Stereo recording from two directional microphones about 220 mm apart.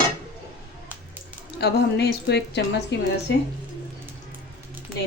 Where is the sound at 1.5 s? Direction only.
50° left (ahead or behind).